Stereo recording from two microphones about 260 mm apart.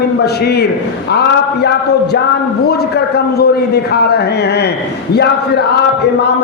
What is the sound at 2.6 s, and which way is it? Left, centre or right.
A man's voice, left.